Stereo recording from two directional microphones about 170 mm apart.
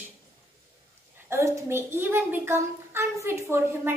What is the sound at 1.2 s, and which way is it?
A woman's voice, 15° right (ahead or behind).